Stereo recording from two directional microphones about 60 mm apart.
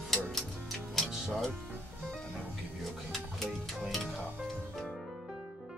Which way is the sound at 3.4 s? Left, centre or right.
Centre.